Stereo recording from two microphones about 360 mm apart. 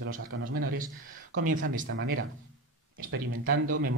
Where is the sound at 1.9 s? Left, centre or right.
Right.